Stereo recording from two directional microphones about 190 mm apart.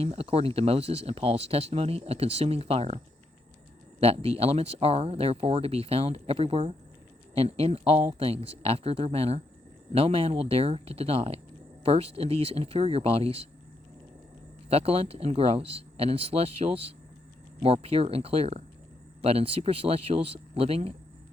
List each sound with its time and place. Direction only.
0.0 s speech: 30° right (ahead or behind)
4.0 s speech: 30° right (ahead or behind)
14.7 s speech: 30° right (ahead or behind)